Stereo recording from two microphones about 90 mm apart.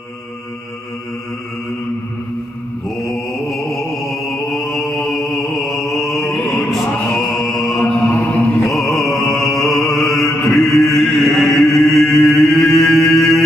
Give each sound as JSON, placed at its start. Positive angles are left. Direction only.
{"t": 3.1, "sound": "music", "side_deg": 0}
{"t": 4.5, "sound": "mantra", "side_deg": 0}
{"t": 6.3, "sound": "music", "side_deg": 0}
{"t": 7.8, "sound": "mantra", "side_deg": 30}
{"t": 8.6, "sound": "music", "side_deg": 0}
{"t": 10.5, "sound": "mantra", "side_deg": 0}
{"t": 13.1, "sound": "music", "side_deg": 0}